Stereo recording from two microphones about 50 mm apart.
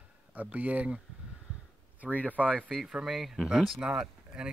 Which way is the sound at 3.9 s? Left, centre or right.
Centre.